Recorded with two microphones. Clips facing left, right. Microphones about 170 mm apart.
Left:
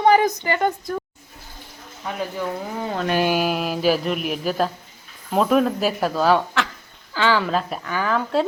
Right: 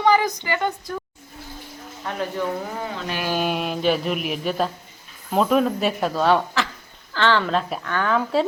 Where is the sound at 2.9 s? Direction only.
50° left (ahead or behind).